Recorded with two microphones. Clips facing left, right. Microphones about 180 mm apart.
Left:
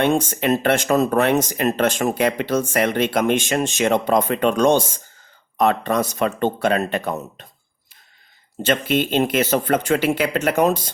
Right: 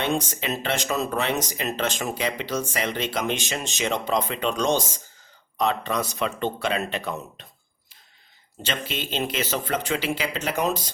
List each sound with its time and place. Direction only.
0.0 s speech: 55° left (ahead or behind)
8.6 s speech: 55° left (ahead or behind)